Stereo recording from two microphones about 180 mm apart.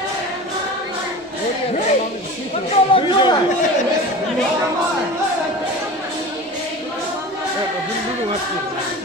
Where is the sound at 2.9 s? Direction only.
25° left (ahead or behind).